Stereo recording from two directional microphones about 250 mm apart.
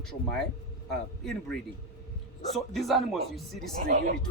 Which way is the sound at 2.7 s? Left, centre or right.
Centre.